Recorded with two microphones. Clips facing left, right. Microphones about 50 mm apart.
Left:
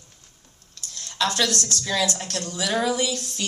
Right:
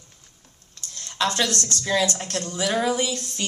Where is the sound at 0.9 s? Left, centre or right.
Right.